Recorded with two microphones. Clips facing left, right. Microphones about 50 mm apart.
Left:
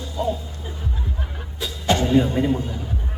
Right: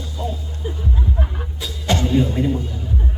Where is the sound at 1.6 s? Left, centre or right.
Centre.